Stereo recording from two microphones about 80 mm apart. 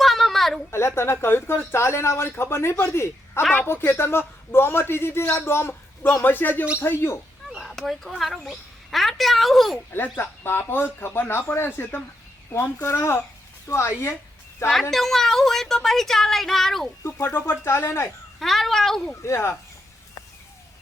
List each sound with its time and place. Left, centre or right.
0.0 s a sound: centre
0.7 s a man's voice: left
7.5 s a sound: centre
8.1 s a woman's voice: centre
9.9 s a man's voice: left
14.7 s a woman's voice: centre
17.0 s speech: left
18.3 s a woman's voice: centre
19.2 s speech: left